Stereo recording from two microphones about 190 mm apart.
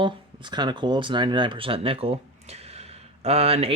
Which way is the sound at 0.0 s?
25° right (ahead or behind).